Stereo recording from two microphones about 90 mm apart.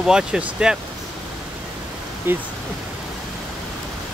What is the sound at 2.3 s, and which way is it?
Speech, 25° right (ahead or behind).